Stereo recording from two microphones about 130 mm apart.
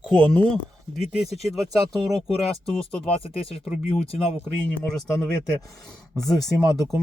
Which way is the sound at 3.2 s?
45° left (ahead or behind).